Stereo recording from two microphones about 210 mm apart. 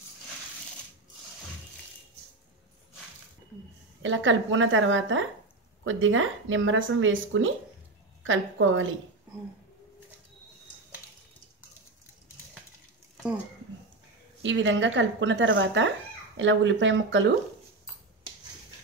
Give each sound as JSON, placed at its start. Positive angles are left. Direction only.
{"t": 4.0, "sound": "a woman's voice", "side_deg": -65}
{"t": 14.4, "sound": "a woman's voice", "side_deg": -60}